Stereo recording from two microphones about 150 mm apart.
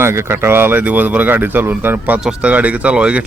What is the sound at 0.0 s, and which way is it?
Speech, 15° right (ahead or behind).